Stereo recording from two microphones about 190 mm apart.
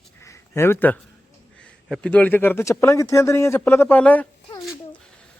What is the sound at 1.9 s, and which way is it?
A man's voice, 5° left (ahead or behind).